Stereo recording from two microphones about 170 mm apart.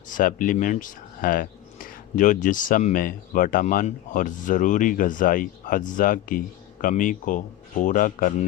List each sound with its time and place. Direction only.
0.1 s speech: 55° left (ahead or behind)